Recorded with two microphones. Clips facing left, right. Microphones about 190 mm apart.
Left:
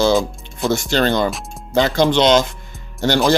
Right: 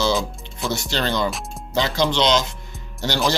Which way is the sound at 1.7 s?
50° left (ahead or behind).